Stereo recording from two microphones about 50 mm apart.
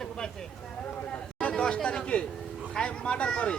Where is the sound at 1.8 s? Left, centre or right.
Left.